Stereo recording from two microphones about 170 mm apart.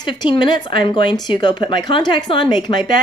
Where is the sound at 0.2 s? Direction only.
25° left (ahead or behind).